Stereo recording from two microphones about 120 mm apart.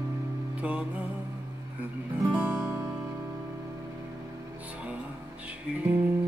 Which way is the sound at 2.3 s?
10° right (ahead or behind).